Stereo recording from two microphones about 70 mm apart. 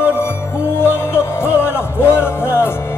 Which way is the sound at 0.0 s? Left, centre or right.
Left.